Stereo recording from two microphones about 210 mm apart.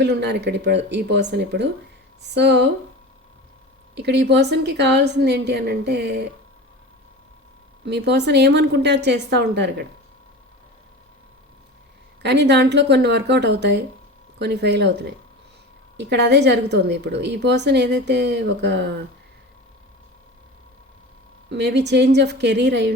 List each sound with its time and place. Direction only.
0.0 s a woman's voice: 55° right (ahead or behind)
3.9 s a woman's voice: 55° right (ahead or behind)
7.9 s a woman's voice: 50° right (ahead or behind)
12.2 s a woman's voice: 55° right (ahead or behind)
21.5 s a woman's voice: 55° right (ahead or behind)